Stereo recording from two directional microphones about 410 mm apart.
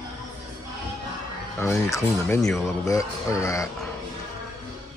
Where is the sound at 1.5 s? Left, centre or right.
Centre.